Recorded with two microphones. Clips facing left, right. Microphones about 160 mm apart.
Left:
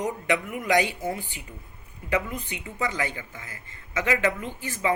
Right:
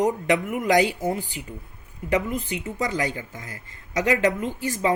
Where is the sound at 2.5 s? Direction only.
40° right (ahead or behind).